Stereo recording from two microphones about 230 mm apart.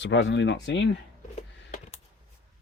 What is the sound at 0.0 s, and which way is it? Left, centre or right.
Speech, left.